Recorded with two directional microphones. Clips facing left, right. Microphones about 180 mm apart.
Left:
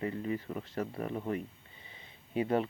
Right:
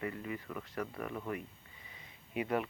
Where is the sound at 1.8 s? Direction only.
30° left (ahead or behind).